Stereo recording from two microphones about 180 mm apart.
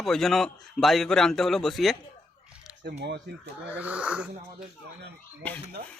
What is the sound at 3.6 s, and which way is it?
Speech, 10° right (ahead or behind).